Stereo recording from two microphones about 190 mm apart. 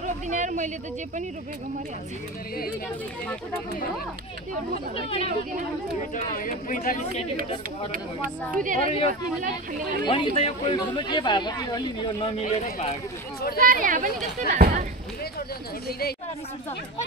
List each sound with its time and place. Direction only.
0.0 s a sound: 40° right (ahead or behind)
4.9 s speech: 30° left (ahead or behind)
6.1 s speech: 45° left (ahead or behind)
8.6 s speech: 45° right (ahead or behind)
10.0 s speech: 25° left (ahead or behind)
13.6 s speech: 45° right (ahead or behind)